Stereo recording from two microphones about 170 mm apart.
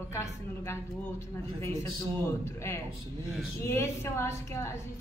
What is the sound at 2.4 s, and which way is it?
A woman's voice, 15° left (ahead or behind).